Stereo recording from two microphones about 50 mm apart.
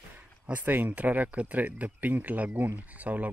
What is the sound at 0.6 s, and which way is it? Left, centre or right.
A man's voice, right.